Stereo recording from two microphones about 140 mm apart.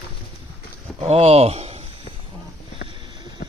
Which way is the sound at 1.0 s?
45° right (ahead or behind).